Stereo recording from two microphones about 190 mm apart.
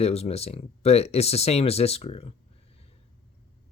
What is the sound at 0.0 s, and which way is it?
Speech, 35° left (ahead or behind).